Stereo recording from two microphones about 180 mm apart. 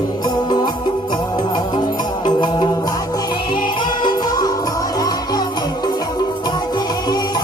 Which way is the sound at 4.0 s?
25° left (ahead or behind).